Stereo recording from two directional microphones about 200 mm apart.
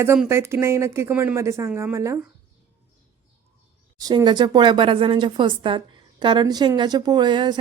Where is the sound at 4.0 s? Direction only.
20° right (ahead or behind).